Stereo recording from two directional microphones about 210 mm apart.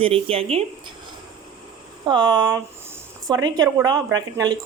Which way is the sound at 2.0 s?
20° right (ahead or behind).